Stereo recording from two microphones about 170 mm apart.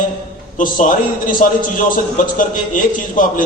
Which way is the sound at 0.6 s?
50° left (ahead or behind).